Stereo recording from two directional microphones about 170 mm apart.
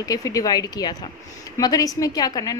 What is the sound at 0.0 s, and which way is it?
A woman's voice, 20° left (ahead or behind).